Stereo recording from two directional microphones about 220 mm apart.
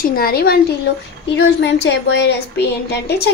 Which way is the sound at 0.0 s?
40° left (ahead or behind).